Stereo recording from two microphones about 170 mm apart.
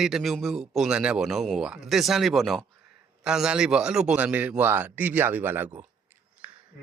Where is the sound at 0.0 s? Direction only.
Centre (ahead or behind).